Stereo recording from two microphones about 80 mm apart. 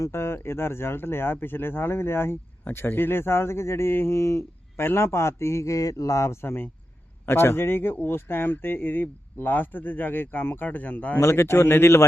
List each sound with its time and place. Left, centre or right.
0.0 s speech: left
11.2 s speech: left